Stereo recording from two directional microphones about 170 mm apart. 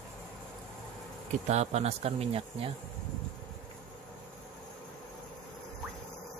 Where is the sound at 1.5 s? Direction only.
40° right (ahead or behind).